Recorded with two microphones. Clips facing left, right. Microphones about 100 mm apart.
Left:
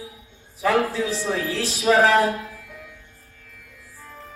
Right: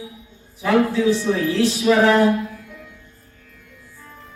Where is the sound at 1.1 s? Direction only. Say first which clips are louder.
Right 6 dB; 30° left (ahead or behind).